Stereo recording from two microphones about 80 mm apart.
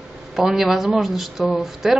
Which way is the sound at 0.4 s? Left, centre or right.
Centre.